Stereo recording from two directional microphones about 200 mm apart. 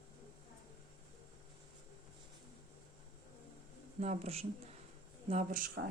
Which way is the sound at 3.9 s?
35° right (ahead or behind).